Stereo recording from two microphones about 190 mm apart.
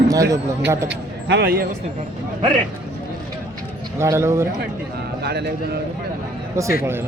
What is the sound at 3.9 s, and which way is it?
Speech, 15° right (ahead or behind).